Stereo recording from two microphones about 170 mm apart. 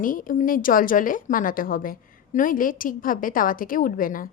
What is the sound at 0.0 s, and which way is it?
A woman's voice, 55° left (ahead or behind).